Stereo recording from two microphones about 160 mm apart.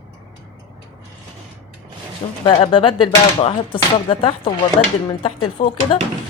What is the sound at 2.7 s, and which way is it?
Speech, 35° left (ahead or behind).